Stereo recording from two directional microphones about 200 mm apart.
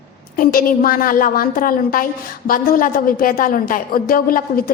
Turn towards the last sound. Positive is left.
turn(degrees=45)  # may be behind; listen again after turning